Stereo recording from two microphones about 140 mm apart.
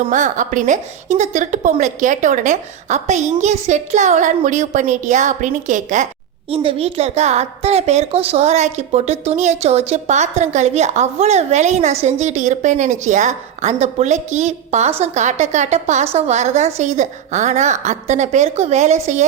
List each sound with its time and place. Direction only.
0.1 s a woman's voice: 65° right (ahead or behind)
6.5 s a woman's voice: 40° right (ahead or behind)